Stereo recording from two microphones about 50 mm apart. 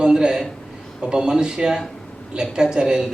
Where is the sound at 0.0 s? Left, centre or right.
Centre.